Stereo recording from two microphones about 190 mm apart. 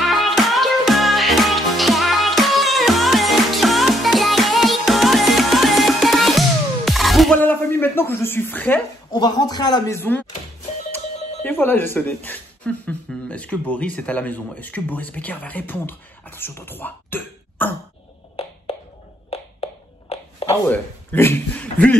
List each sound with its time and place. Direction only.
0.0 s music: centre (ahead or behind)
9.1 s speech: 20° left (ahead or behind)
11.4 s speech: 10° left (ahead or behind)
19.3 s a sound: 30° left (ahead or behind)
20.6 s speech: 10° left (ahead or behind)